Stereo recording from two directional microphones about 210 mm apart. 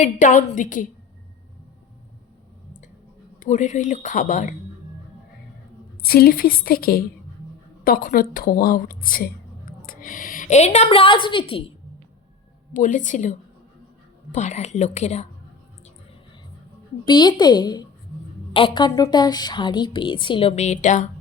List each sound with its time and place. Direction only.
0.0 s speech: 35° left (ahead or behind)
3.4 s speech: 35° left (ahead or behind)
6.0 s a woman's voice: 45° left (ahead or behind); by 11.6 s 25° left (ahead or behind)
12.7 s speech: 35° left (ahead or behind)
14.3 s speech: 35° left (ahead or behind)
17.1 s a woman's voice: 20° left (ahead or behind)